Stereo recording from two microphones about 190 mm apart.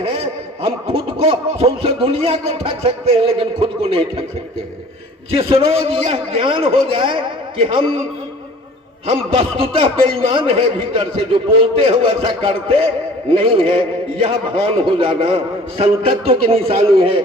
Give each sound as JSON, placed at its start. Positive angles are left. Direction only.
{"t": 0.0, "sound": "speech", "side_deg": -30}
{"t": 5.3, "sound": "a man's voice", "side_deg": -30}
{"t": 9.0, "sound": "speech", "side_deg": -30}